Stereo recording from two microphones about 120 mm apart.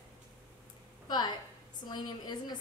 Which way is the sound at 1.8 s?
35° left (ahead or behind).